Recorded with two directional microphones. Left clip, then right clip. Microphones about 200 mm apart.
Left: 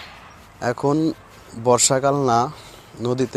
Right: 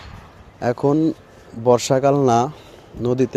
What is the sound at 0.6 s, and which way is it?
Speech, 25° right (ahead or behind).